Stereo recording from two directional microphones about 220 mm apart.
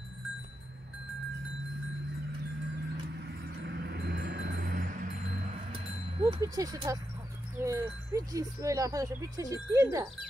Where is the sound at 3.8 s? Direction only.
50° right (ahead or behind).